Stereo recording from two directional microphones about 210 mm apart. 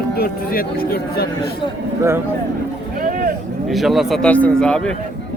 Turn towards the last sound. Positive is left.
turn(degrees=5)  # may be behind; listen again after turning